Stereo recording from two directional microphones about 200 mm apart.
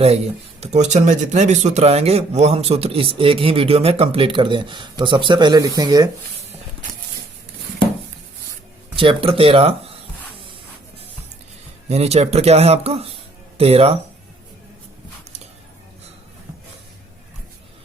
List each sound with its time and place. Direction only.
0.6 s speech: 35° right (ahead or behind)
9.0 s speech: 25° right (ahead or behind)
11.9 s speech: 30° right (ahead or behind)